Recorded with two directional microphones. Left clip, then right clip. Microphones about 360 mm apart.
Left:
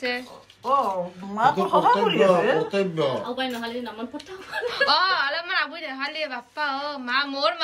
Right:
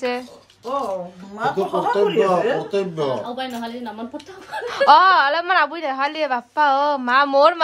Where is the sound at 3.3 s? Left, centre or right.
Right.